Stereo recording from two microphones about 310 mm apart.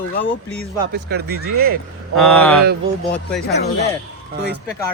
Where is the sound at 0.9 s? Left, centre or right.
Right.